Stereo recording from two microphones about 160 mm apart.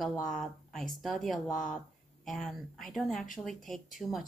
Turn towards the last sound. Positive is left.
turn(degrees=0)  # may be behind; listen again after turning